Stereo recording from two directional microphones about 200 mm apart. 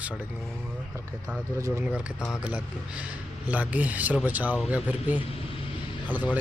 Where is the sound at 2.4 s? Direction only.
5° right (ahead or behind).